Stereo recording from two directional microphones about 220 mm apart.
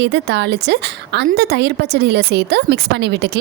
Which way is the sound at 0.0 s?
50° right (ahead or behind).